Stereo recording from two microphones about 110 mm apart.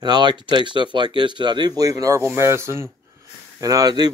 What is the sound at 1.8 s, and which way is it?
Speech, 30° right (ahead or behind).